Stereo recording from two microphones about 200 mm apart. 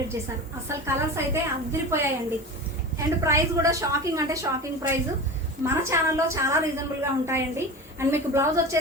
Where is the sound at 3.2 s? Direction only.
15° right (ahead or behind).